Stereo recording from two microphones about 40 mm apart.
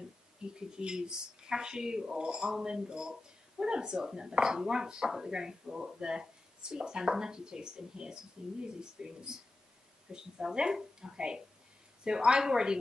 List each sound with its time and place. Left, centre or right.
0.6 s speech: centre